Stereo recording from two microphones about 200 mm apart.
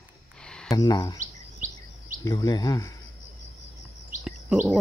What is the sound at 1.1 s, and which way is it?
Chirp, 40° right (ahead or behind).